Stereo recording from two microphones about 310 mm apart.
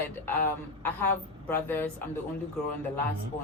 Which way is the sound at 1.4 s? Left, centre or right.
Centre.